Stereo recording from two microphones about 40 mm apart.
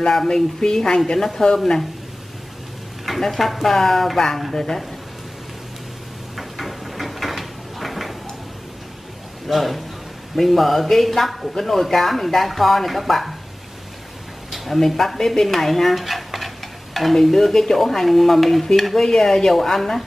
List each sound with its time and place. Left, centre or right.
0.1 s a woman's voice: centre
3.2 s stir: centre
3.6 s a woman's voice: centre
4.4 s stir: centre
6.3 s a sound: centre
9.5 s stir: centre
14.5 s speech: centre
15.1 s stir: centre
19.0 s a woman's voice: centre